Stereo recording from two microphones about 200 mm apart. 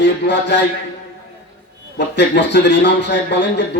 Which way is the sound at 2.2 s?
60° left (ahead or behind).